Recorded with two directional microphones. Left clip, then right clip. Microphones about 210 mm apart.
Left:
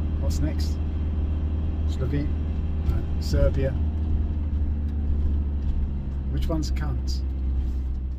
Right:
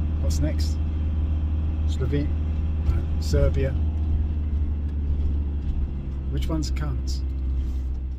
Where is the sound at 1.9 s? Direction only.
15° right (ahead or behind).